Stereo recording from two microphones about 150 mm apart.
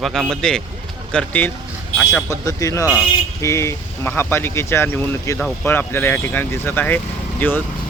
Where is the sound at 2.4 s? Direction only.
20° left (ahead or behind).